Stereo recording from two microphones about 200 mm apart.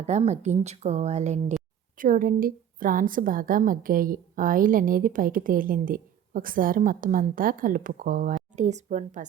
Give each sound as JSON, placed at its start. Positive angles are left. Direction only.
{"t": 0.0, "sound": "a woman's voice", "side_deg": -35}